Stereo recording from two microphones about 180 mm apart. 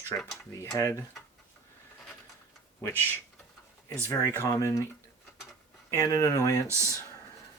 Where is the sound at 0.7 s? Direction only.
15° left (ahead or behind).